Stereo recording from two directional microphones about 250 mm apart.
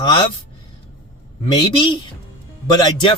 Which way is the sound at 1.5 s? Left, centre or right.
Centre.